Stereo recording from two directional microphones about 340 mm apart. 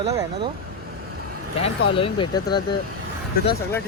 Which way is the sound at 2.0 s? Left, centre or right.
Centre.